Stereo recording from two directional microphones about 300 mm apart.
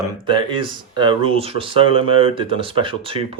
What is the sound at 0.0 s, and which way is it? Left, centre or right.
Speech, centre.